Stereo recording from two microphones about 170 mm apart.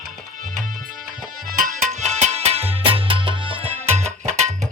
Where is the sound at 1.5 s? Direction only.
50° right (ahead or behind).